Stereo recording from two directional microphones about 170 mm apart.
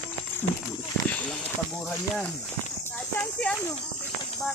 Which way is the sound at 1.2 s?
5° left (ahead or behind).